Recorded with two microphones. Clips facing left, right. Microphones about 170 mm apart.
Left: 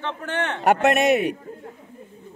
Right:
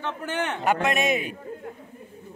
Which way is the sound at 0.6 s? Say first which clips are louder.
Left 7 dB; 70° left (ahead or behind).